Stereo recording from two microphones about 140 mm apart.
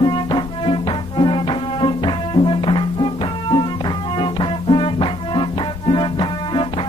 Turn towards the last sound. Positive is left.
turn(degrees=35)  # may be behind; listen again after turning